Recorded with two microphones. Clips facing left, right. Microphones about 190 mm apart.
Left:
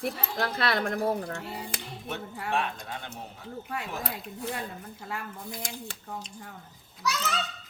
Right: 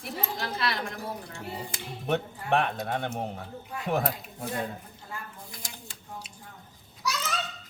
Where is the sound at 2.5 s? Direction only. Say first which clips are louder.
Right 6 dB; 60° right (ahead or behind).